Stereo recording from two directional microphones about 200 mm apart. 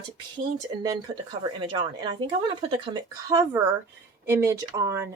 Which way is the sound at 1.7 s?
20° right (ahead or behind).